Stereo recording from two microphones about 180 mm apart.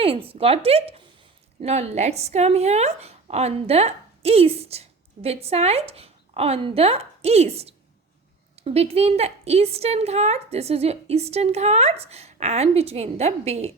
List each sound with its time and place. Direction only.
0.0 s a woman's voice: 30° right (ahead or behind)